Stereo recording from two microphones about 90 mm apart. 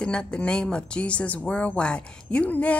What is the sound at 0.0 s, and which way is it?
A woman's voice, 10° left (ahead or behind).